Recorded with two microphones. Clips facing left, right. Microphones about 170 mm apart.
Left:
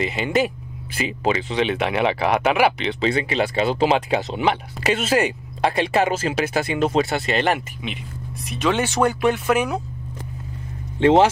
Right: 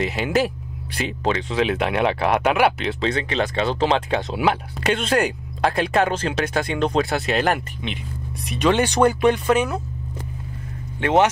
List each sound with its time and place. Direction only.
0.0 s speech: centre (ahead or behind)
11.0 s speech: 30° left (ahead or behind)